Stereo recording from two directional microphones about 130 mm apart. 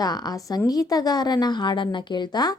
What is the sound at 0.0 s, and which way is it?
Speech, 30° left (ahead or behind).